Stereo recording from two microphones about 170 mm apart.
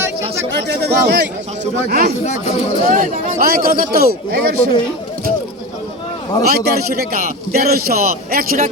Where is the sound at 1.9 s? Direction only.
60° right (ahead or behind).